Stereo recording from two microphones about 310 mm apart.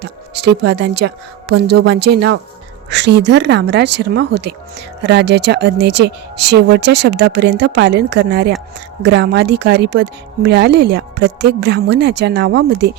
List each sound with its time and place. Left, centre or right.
0.0 s a woman's voice: right